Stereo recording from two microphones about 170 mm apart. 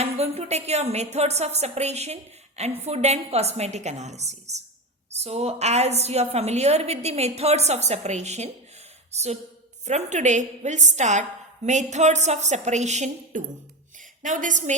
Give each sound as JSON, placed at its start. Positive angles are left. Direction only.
{"t": 0.0, "sound": "a woman's voice", "side_deg": -40}